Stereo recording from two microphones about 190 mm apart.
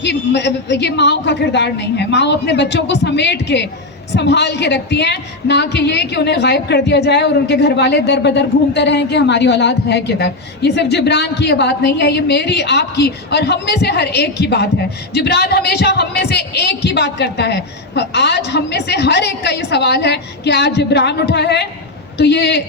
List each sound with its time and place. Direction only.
0.0 s a woman's voice: 65° left (ahead or behind)